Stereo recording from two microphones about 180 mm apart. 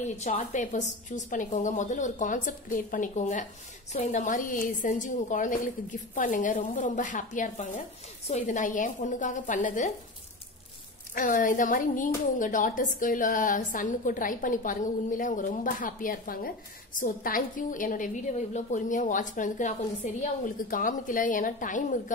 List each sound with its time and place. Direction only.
0.0 s a woman's voice: 45° left (ahead or behind)
11.1 s a woman's voice: 50° left (ahead or behind)